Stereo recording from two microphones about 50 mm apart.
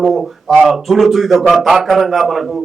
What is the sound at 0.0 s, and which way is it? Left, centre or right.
A man's voice, centre.